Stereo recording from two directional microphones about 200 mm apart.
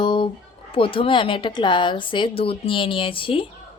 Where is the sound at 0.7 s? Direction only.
25° left (ahead or behind).